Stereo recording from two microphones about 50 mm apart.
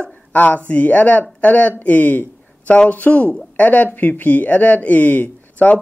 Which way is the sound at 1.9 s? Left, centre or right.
Left.